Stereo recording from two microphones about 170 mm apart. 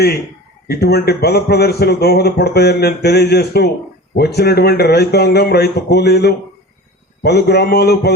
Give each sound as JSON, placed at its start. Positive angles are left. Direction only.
{"t": 0.7, "sound": "a man's voice", "side_deg": 65}